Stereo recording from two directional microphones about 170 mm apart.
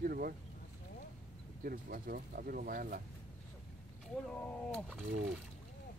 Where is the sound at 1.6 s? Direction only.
55° right (ahead or behind).